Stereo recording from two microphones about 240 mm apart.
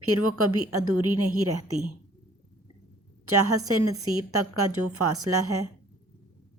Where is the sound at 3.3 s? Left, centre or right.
Right.